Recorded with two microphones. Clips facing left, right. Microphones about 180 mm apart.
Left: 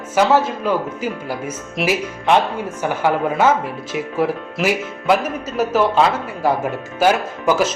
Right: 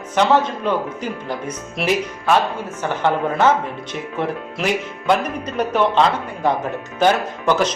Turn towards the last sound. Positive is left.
turn(degrees=5)  # may be behind; listen again after turning